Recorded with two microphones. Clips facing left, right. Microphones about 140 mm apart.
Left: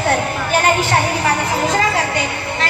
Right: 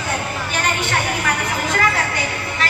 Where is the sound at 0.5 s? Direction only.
40° left (ahead or behind).